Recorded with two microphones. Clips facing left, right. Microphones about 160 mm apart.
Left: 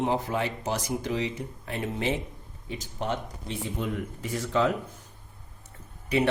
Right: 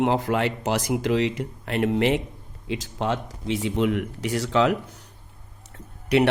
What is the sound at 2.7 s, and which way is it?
Speech, 90° right.